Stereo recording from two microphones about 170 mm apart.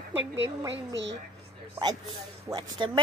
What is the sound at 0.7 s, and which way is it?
Speech, 90° right.